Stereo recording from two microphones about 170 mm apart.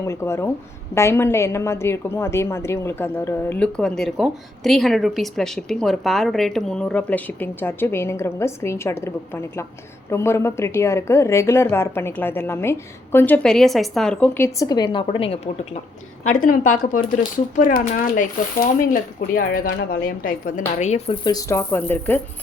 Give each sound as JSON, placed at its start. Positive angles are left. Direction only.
{"t": 0.0, "sound": "a woman's voice", "side_deg": 15}
{"t": 16.2, "sound": "speech", "side_deg": 50}
{"t": 21.2, "sound": "a woman's voice", "side_deg": 20}